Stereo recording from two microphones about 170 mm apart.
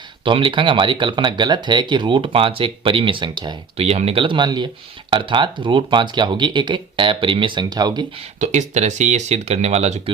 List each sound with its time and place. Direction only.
0.3 s speech: 30° right (ahead or behind)
8.4 s speech: 45° right (ahead or behind)